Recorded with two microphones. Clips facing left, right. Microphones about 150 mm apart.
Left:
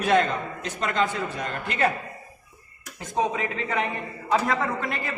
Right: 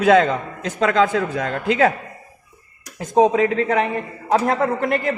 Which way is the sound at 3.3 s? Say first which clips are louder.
Right 10 dB; 90° right.